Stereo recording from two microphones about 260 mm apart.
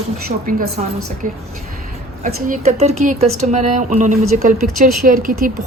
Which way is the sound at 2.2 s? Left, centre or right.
Right.